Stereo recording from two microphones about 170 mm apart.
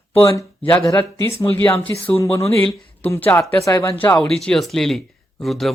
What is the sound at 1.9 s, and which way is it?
Speech, 15° left (ahead or behind).